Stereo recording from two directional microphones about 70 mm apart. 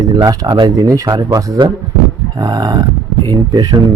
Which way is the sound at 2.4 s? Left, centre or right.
Right.